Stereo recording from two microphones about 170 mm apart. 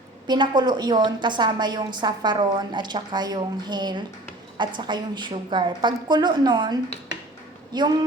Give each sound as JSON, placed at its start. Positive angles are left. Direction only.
{"t": 0.3, "sound": "a woman's voice", "side_deg": -25}